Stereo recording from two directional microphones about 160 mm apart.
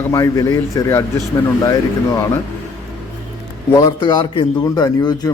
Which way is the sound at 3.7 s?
25° left (ahead or behind).